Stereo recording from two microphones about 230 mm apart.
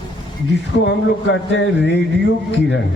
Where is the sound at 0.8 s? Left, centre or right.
Left.